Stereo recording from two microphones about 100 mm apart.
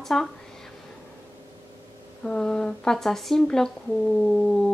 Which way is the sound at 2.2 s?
10° left (ahead or behind).